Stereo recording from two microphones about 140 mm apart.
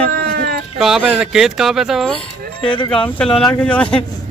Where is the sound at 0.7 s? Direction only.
5° right (ahead or behind).